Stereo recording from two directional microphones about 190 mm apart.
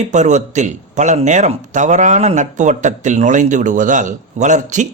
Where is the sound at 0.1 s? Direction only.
35° right (ahead or behind).